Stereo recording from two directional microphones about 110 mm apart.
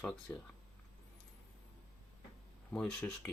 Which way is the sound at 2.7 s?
5° left (ahead or behind).